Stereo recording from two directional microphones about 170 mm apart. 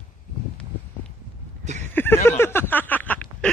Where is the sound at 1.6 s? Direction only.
45° right (ahead or behind).